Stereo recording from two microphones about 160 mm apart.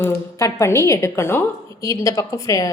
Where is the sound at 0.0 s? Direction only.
20° left (ahead or behind).